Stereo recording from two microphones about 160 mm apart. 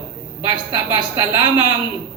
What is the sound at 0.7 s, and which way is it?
Speech, 25° right (ahead or behind).